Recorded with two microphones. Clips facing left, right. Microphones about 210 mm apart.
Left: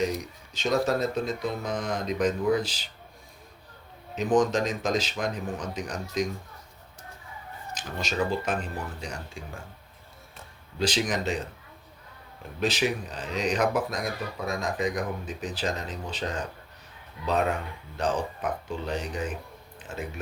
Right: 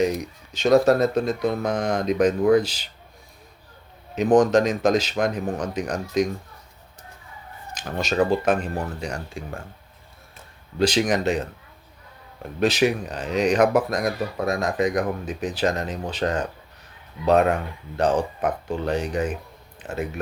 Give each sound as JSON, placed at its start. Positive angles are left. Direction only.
{"t": 0.5, "sound": "speech", "side_deg": -65}
{"t": 4.2, "sound": "speech", "side_deg": -65}
{"t": 8.4, "sound": "speech", "side_deg": -60}
{"t": 10.8, "sound": "speech", "side_deg": -65}
{"t": 12.5, "sound": "speech", "side_deg": -65}